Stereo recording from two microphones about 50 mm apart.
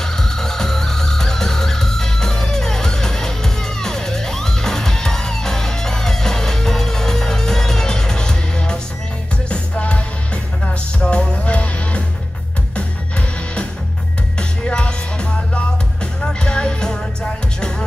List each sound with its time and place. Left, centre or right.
0.0 s music: centre
14.7 s music: centre